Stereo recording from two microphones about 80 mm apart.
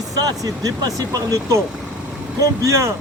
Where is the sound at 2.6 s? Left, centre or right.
Right.